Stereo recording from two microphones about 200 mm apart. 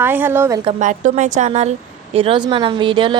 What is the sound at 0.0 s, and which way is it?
Speech, 10° right (ahead or behind).